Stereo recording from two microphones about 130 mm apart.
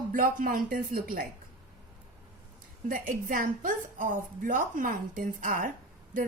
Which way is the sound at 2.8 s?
90° right.